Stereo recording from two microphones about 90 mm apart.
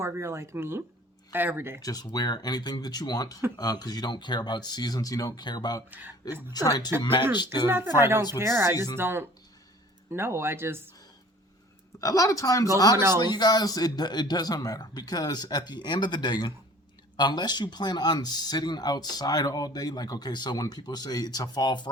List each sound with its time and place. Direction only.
0.0 s speech: 30° right (ahead or behind)
1.8 s speech: 45° left (ahead or behind)
5.9 s speech: 20° right (ahead or behind)
6.5 s speech: 45° left (ahead or behind)
7.0 s speech: 70° left (ahead or behind)
7.3 s speech: 55° left (ahead or behind)
7.7 s speech: 25° right (ahead or behind)
11.9 s a woman's voice: 40° left (ahead or behind)
13.1 s speech: 50° left (ahead or behind)